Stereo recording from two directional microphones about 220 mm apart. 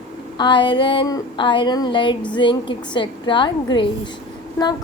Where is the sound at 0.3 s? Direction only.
20° left (ahead or behind).